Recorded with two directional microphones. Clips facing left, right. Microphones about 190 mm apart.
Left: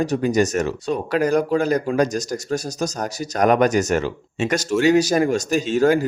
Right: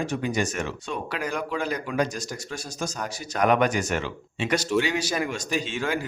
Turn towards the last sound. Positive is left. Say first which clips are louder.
# left 10 dB
turn(degrees=40)  # may be behind; listen again after turning